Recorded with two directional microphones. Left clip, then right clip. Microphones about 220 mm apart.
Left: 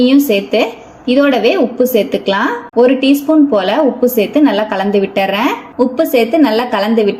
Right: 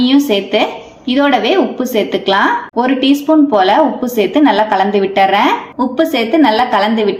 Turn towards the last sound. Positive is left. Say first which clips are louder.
# even
turn(degrees=30)  # may be behind; listen again after turning